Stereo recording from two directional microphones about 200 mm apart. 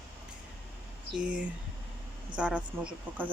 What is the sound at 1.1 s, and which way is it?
A woman's voice, 5° right (ahead or behind).